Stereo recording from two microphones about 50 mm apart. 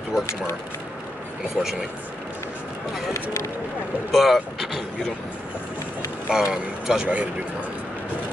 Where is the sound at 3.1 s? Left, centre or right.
Left.